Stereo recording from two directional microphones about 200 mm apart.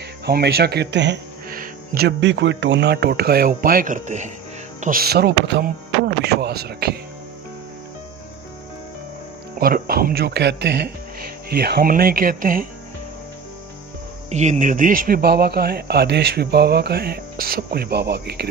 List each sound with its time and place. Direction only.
0.2 s speech: 55° right (ahead or behind)
9.6 s speech: 50° right (ahead or behind)
14.3 s speech: 35° right (ahead or behind); by 18.5 s 55° right (ahead or behind)